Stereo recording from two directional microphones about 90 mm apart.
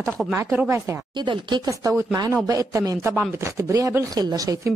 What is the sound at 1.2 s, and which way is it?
Speech, 60° right (ahead or behind).